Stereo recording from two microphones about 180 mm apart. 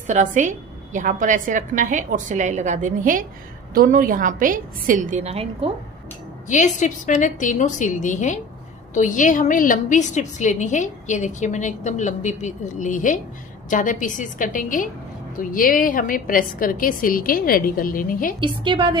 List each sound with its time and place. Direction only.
0.0 s a woman's voice: 45° right (ahead or behind)
6.4 s a woman's voice: 40° left (ahead or behind)
18.4 s a woman's voice: 25° right (ahead or behind)